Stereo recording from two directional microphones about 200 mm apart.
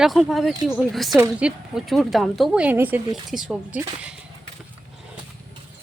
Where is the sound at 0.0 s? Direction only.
Centre (ahead or behind).